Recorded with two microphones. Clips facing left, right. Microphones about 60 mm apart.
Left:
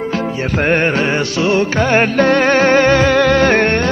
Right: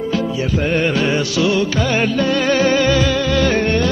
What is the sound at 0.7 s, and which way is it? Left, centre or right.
Music, left.